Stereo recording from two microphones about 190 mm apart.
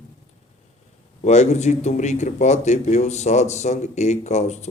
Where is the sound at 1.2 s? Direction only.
40° left (ahead or behind).